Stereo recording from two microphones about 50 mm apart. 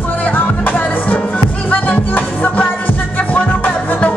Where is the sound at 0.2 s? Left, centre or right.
Left.